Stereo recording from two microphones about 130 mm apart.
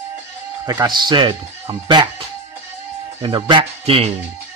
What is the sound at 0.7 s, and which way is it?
Speech, 30° right (ahead or behind).